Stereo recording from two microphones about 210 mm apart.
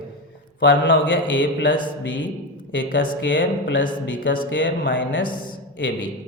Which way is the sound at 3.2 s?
65° left (ahead or behind).